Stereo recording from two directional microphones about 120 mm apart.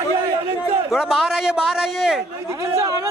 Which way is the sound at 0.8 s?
5° right (ahead or behind).